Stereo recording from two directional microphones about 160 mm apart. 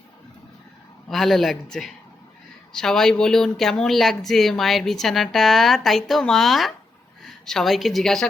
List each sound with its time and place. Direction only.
1.0 s a woman's voice: centre (ahead or behind)